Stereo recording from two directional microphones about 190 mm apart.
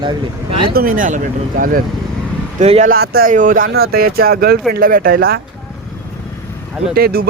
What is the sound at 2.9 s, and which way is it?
Speech, 50° right (ahead or behind).